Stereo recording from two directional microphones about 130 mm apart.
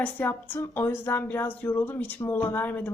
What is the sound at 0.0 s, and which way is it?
A woman's voice, 15° left (ahead or behind).